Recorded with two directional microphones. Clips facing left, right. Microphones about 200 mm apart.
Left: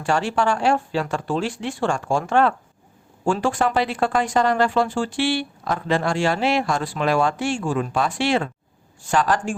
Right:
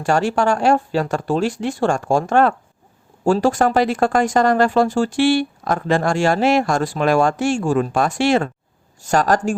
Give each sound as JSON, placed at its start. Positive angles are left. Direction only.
{"t": 0.0, "sound": "speech", "side_deg": -45}